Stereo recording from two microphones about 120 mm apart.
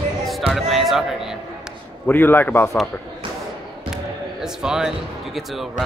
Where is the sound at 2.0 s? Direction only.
15° left (ahead or behind).